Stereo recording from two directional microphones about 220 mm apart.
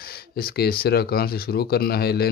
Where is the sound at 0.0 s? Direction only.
45° left (ahead or behind).